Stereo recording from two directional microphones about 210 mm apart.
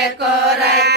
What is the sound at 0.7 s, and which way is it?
Chant, 50° right (ahead or behind).